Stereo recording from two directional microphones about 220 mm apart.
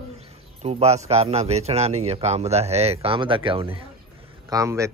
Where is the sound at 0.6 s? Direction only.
30° right (ahead or behind).